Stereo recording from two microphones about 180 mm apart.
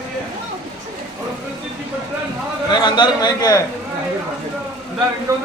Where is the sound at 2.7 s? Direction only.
25° left (ahead or behind).